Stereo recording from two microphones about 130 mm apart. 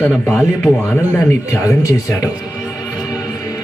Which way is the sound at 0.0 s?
5° right (ahead or behind).